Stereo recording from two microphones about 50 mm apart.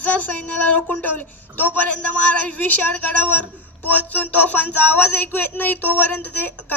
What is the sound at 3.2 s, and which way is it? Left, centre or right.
A man's voice, left.